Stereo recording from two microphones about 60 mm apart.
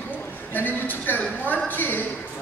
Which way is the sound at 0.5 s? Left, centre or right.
Left.